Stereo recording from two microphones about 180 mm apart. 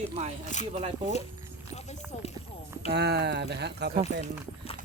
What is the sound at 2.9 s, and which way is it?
Speech, 65° right (ahead or behind).